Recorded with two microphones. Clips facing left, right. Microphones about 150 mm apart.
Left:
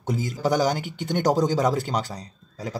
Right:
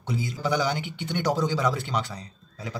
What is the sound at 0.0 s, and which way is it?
A man's voice, 45° left (ahead or behind).